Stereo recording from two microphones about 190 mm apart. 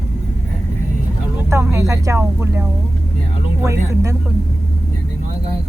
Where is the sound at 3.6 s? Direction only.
15° right (ahead or behind).